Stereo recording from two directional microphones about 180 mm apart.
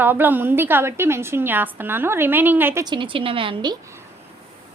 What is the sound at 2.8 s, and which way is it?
Speech, 25° right (ahead or behind).